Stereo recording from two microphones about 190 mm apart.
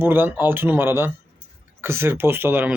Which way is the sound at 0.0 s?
10° right (ahead or behind).